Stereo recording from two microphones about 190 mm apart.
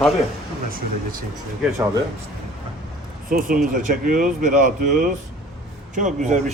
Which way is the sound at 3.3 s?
50° right (ahead or behind).